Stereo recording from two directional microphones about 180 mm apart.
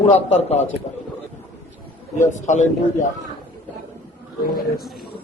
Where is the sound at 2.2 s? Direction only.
40° left (ahead or behind).